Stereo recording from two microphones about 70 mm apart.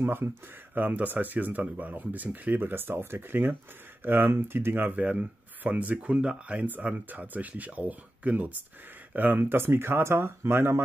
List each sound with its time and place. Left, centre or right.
0.0 s speech: right
5.0 s speech: right